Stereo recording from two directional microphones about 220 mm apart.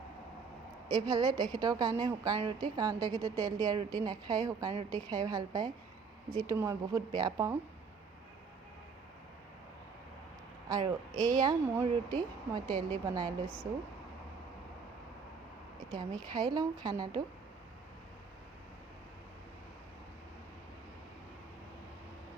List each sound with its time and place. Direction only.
1.0 s a woman's voice: 20° right (ahead or behind)
10.7 s a woman's voice: 15° right (ahead or behind)
15.9 s a woman's voice: 20° right (ahead or behind)